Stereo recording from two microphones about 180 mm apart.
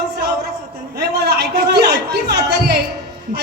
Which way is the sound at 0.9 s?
65° right (ahead or behind).